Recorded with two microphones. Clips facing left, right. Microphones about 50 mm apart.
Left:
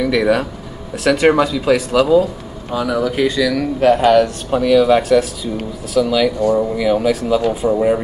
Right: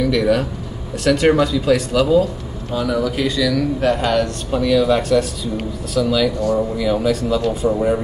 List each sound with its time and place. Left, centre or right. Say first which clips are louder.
0.0 s speech: left 1 dB; centre